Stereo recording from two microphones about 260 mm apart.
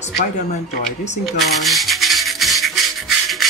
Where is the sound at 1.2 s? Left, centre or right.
Centre.